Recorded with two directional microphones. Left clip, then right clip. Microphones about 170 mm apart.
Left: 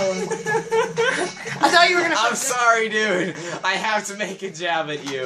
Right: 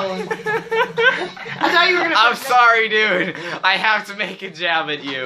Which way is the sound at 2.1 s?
Centre (ahead or behind).